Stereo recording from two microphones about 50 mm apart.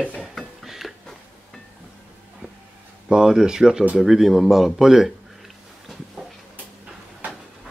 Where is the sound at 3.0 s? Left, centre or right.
Centre.